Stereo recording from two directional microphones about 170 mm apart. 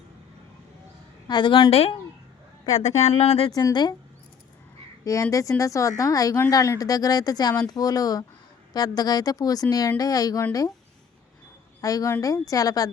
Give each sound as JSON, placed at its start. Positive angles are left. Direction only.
{"t": 1.3, "sound": "speech", "side_deg": 25}
{"t": 2.6, "sound": "speech", "side_deg": 20}
{"t": 3.0, "sound": "speech", "side_deg": 40}
{"t": 3.5, "sound": "speech", "side_deg": 25}
{"t": 5.0, "sound": "speech", "side_deg": 20}
{"t": 11.8, "sound": "speech", "side_deg": 20}